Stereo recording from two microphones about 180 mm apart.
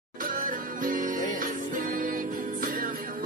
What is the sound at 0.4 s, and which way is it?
Music, 50° right (ahead or behind).